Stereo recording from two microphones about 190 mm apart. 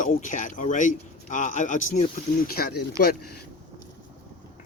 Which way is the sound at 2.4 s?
50° left (ahead or behind).